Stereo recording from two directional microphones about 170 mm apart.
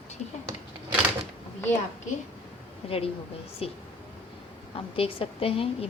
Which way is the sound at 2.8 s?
35° left (ahead or behind).